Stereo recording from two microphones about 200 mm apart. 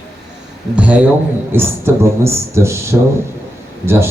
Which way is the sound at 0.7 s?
5° right (ahead or behind).